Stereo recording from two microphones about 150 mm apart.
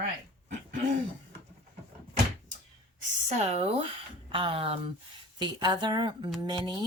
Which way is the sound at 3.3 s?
45° right (ahead or behind).